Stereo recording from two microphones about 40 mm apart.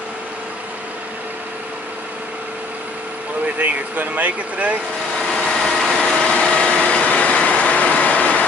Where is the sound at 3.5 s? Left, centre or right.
Right.